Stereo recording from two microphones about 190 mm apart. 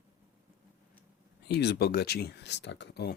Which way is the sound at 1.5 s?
60° left (ahead or behind).